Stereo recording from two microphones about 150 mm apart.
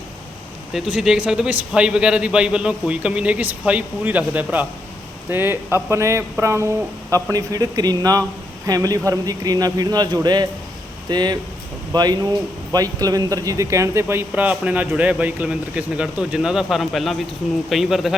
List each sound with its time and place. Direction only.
0.7 s speech: 5° right (ahead or behind)